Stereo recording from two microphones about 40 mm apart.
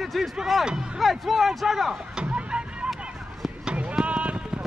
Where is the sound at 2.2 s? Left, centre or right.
Right.